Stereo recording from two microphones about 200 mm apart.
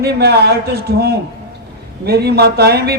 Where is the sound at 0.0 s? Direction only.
55° right (ahead or behind).